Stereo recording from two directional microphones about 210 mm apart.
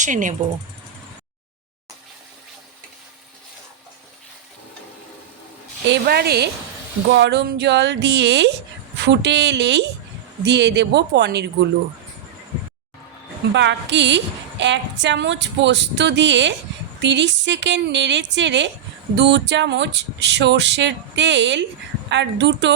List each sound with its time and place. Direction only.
0.0 s speech: 40° right (ahead or behind)
5.9 s speech: 50° right (ahead or behind)
13.5 s speech: 60° right (ahead or behind)